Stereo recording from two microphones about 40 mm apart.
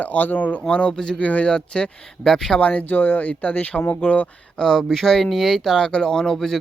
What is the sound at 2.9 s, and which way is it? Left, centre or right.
Speech, left.